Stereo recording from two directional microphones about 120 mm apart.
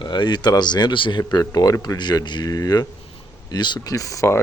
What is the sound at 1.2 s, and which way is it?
Speech, 30° left (ahead or behind).